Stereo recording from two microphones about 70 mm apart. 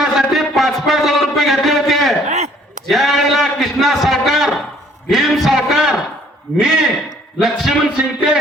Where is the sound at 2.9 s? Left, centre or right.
Centre.